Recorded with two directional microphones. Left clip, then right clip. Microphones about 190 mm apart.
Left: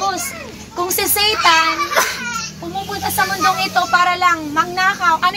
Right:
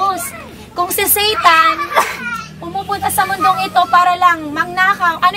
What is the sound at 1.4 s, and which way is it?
Speech, 40° right (ahead or behind).